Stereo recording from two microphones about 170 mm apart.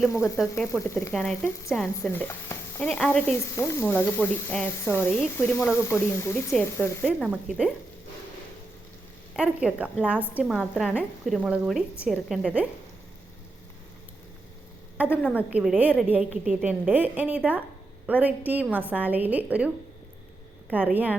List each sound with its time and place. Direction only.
0.8 s sizzle: 15° left (ahead or behind)
7.0 s a woman's voice: 5° right (ahead or behind)
9.3 s a woman's voice: 5° right (ahead or behind)
14.9 s a woman's voice: 10° right (ahead or behind)